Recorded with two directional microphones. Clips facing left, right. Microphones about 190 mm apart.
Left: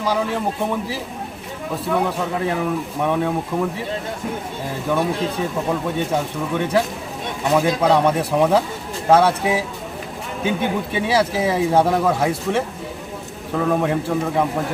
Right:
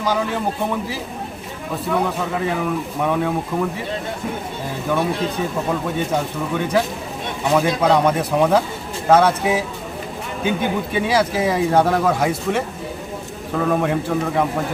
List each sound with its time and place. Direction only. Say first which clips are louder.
0.0 s a man's voice: even; centre (ahead or behind)
4.9 s a man's voice: even; centre (ahead or behind)